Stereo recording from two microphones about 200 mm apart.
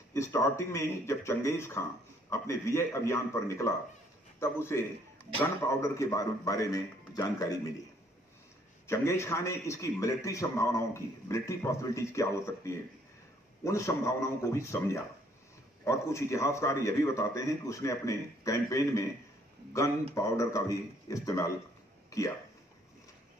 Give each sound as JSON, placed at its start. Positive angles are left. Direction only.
{"t": 0.1, "sound": "a man's voice", "side_deg": 15}
{"t": 8.8, "sound": "a man's voice", "side_deg": 15}